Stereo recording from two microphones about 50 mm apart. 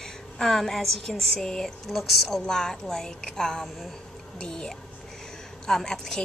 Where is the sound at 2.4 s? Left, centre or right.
Centre.